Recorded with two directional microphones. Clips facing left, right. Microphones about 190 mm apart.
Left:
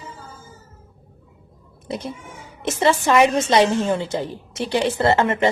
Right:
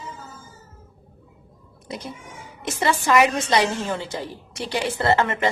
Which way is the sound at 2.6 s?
25° left (ahead or behind).